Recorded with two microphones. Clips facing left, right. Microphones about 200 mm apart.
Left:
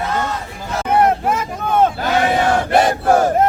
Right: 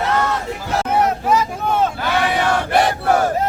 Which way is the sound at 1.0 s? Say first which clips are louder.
Left 1 dB; 55° left (ahead or behind).